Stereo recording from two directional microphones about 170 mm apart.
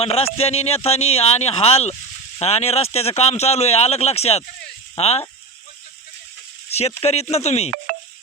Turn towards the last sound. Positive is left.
turn(degrees=40)  # may be behind; listen again after turning